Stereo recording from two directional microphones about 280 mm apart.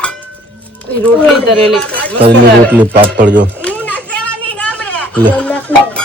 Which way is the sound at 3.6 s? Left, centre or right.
Centre.